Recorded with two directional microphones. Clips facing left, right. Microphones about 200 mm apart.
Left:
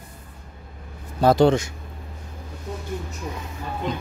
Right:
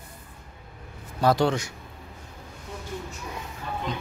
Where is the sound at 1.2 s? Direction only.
25° left (ahead or behind).